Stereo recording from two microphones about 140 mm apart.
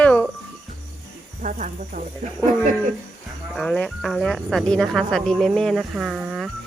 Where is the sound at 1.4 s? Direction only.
65° right (ahead or behind).